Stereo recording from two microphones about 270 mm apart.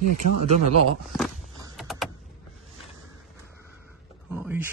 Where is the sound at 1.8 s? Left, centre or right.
Centre.